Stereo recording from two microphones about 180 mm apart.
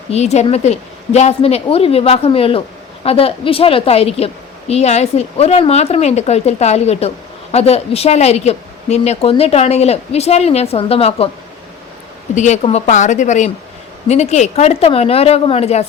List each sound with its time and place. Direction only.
0.1 s a woman's voice: 35° left (ahead or behind)
12.3 s a woman's voice: 40° left (ahead or behind)